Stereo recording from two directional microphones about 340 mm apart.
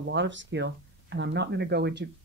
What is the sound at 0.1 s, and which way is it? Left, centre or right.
Speech, right.